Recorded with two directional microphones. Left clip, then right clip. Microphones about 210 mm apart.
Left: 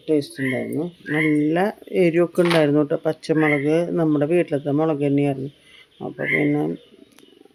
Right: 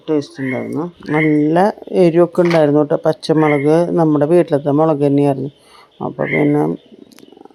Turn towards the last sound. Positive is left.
turn(degrees=-20)  # may be behind; listen again after turning